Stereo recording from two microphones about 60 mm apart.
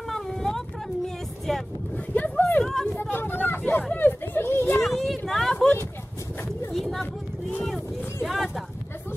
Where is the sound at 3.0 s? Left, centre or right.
Left.